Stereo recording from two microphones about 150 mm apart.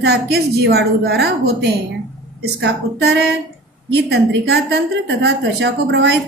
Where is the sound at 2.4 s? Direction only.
90° right.